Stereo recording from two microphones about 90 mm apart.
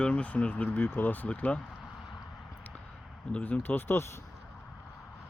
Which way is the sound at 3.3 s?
20° left (ahead or behind).